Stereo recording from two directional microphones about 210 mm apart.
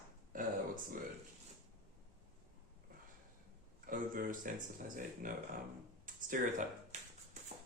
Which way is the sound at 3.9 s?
40° right (ahead or behind).